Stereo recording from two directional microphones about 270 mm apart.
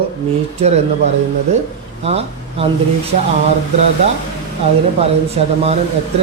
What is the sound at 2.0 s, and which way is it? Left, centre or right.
Speech, right.